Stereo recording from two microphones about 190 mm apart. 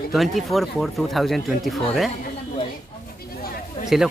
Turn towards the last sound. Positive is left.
turn(degrees=0)  # may be behind; listen again after turning